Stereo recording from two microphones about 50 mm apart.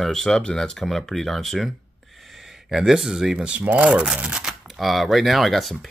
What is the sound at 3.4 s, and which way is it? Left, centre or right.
Speech, right.